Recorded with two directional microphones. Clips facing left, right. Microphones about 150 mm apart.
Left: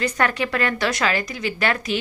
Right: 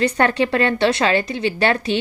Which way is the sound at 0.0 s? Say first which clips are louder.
Right 5 dB; 30° right (ahead or behind).